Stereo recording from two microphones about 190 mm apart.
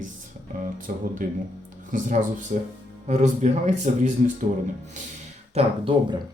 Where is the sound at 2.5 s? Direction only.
45° right (ahead or behind).